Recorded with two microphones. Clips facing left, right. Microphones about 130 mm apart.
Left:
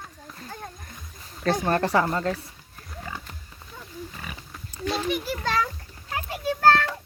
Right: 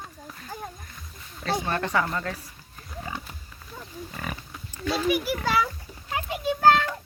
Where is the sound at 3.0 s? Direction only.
15° right (ahead or behind).